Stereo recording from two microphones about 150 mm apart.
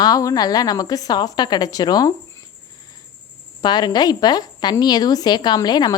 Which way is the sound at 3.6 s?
30° left (ahead or behind).